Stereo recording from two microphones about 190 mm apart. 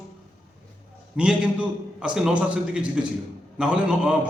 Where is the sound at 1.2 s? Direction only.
5° right (ahead or behind).